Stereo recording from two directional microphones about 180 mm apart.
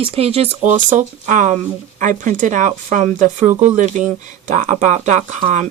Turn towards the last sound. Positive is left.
turn(degrees=-40)  # may be behind; listen again after turning